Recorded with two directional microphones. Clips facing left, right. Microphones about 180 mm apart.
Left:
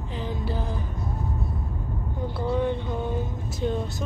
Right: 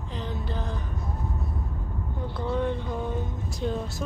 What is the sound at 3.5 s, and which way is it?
Speech, centre (ahead or behind).